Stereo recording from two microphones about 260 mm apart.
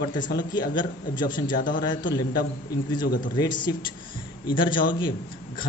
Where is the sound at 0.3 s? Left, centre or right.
Centre.